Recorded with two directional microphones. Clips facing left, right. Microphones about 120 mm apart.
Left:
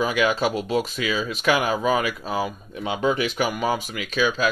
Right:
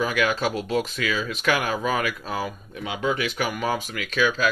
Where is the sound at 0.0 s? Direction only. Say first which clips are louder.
Left 2 dB; 15° left (ahead or behind).